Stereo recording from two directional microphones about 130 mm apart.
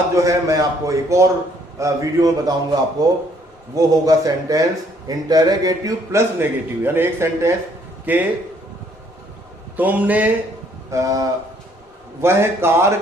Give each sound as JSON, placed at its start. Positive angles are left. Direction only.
{"t": 0.2, "sound": "a man's voice", "side_deg": -25}
{"t": 9.7, "sound": "a man's voice", "side_deg": -15}
{"t": 10.9, "sound": "a man's voice", "side_deg": -25}